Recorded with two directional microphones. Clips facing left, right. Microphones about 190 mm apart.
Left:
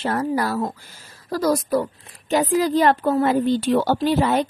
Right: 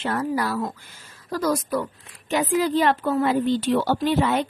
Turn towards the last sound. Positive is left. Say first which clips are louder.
# left 2 dB
turn(degrees=35)  # may be behind; listen again after turning